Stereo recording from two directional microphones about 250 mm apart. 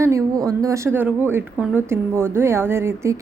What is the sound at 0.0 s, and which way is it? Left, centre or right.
A woman's voice, centre.